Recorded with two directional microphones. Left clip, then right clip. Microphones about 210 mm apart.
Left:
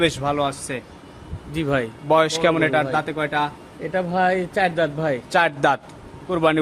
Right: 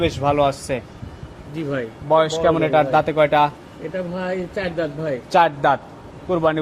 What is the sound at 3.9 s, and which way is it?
Speech, 55° left (ahead or behind).